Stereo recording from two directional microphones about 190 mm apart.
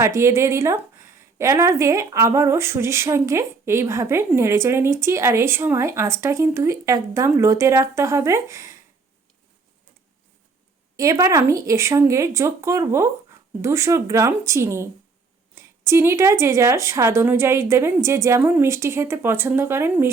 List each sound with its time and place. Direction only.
0.0 s a woman's voice: 15° right (ahead or behind)
10.9 s a woman's voice: 15° right (ahead or behind)